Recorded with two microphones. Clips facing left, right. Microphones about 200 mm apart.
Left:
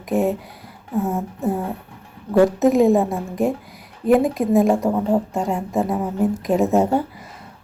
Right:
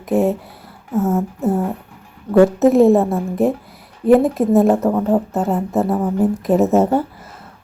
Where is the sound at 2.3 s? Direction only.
15° left (ahead or behind).